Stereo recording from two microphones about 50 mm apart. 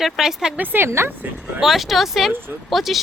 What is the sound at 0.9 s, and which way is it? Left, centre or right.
Speech, right.